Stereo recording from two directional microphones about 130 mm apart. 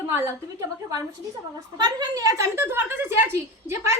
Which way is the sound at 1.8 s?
30° right (ahead or behind).